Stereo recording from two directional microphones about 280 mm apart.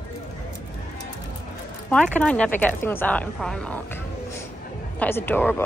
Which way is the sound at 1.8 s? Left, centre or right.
Centre.